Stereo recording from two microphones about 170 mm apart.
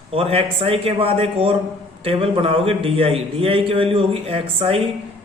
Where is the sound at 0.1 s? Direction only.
35° right (ahead or behind).